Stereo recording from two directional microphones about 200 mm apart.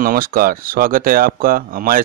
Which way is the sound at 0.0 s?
45° right (ahead or behind).